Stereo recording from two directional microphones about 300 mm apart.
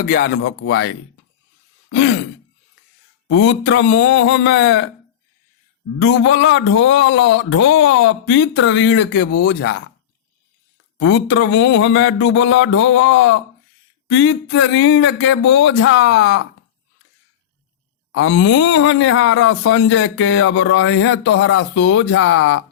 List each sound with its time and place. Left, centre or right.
0.0 s speech: left
1.9 s a sound: left
3.2 s speech: left
6.0 s speech: left
10.9 s speech: left
18.1 s speech: left